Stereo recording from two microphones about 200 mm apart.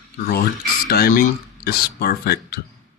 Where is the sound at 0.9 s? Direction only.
50° left (ahead or behind).